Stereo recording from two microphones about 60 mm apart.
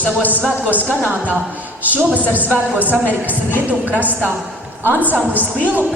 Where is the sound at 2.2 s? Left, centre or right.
Right.